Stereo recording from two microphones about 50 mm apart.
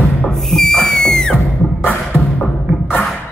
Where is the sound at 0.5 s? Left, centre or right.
Centre.